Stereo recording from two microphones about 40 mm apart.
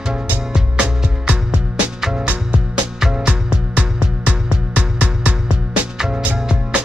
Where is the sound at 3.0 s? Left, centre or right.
Centre.